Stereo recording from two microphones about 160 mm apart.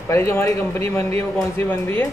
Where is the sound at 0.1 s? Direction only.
15° left (ahead or behind).